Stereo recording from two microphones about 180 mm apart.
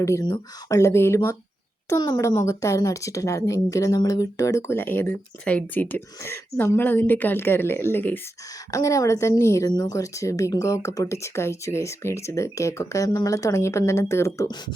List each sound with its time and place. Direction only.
0.0 s a woman's voice: 15° left (ahead or behind)